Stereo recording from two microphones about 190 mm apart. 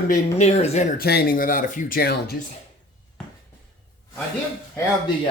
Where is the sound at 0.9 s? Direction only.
55° left (ahead or behind).